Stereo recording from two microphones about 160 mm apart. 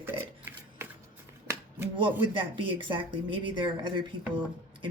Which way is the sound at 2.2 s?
30° right (ahead or behind).